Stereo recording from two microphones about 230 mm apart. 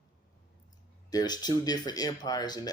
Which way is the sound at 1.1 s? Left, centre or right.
Centre.